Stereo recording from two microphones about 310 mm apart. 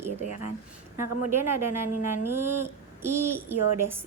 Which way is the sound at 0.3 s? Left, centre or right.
Right.